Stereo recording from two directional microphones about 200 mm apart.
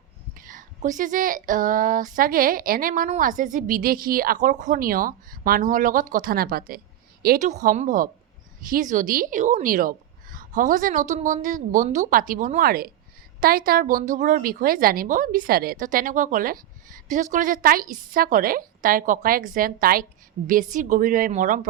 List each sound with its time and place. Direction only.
0.3 s a woman's voice: 40° right (ahead or behind)